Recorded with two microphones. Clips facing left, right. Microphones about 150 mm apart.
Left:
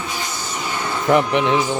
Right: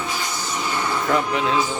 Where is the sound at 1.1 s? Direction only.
20° left (ahead or behind).